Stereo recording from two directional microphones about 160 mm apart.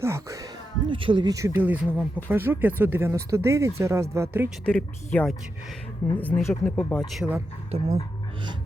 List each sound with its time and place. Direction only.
0.0 s speech: 15° right (ahead or behind)
0.9 s speech: 30° right (ahead or behind); by 4.4 s 15° right (ahead or behind)
4.6 s speech: 5° left (ahead or behind)
7.7 s speech: 40° right (ahead or behind)